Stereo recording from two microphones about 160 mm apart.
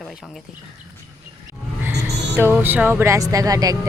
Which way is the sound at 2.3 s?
10° right (ahead or behind).